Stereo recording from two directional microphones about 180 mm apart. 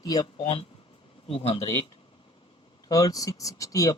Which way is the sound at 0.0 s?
20° left (ahead or behind).